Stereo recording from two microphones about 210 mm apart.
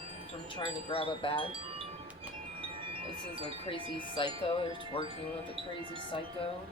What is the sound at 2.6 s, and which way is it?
Wind chime, 25° right (ahead or behind).